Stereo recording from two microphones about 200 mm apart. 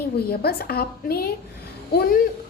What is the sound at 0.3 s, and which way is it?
A woman's voice, 50° left (ahead or behind).